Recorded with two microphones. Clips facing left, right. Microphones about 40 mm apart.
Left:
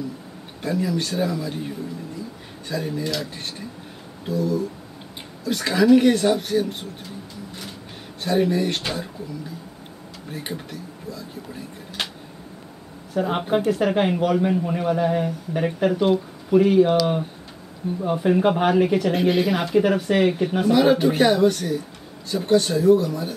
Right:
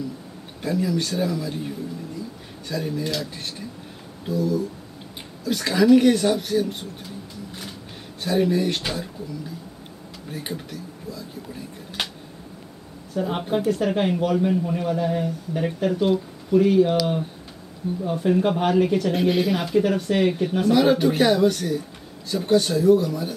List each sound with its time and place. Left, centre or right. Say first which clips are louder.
0.6 s speech: even; centre
2.7 s speech: even; centre
8.2 s speech: even; centre
10.3 s speech: even; centre
13.1 s speech: left 3 dB; left
18.0 s speech: left 2 dB; left; by 23.3 s centre